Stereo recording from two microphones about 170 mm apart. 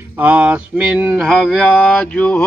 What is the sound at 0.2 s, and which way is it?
Mantra, 10° right (ahead or behind).